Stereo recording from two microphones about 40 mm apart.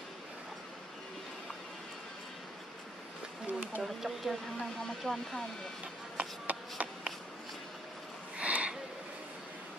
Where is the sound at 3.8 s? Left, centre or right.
Centre.